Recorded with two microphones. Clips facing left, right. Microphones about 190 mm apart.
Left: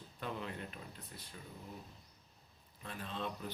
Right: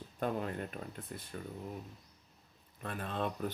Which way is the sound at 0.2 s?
50° right (ahead or behind).